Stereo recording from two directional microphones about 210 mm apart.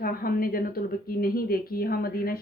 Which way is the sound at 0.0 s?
45° left (ahead or behind).